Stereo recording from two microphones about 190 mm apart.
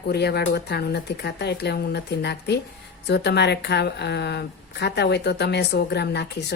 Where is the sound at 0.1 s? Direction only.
60° left (ahead or behind).